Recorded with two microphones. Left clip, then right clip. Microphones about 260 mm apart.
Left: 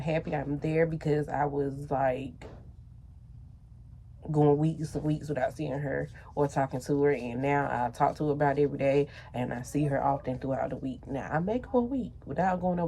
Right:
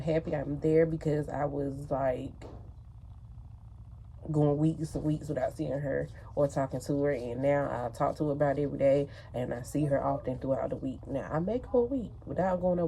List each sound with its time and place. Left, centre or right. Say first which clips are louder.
0.0 s speech: even; centre
4.4 s speech: left 3 dB; centre
6.7 s speech: left 4 dB; centre
7.1 s speech: even; left